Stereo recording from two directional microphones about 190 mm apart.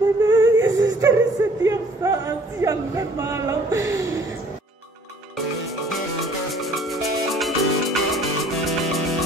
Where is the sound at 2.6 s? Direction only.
15° right (ahead or behind).